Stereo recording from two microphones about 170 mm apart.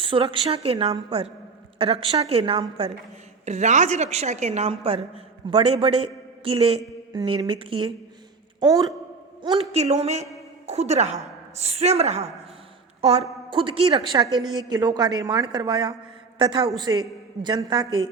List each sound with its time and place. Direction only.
0.0 s a woman's voice: 30° right (ahead or behind)
9.6 s a woman's voice: 40° right (ahead or behind)